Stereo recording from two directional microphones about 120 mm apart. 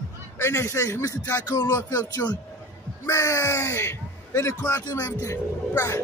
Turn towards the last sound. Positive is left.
turn(degrees=25)  # may be behind; listen again after turning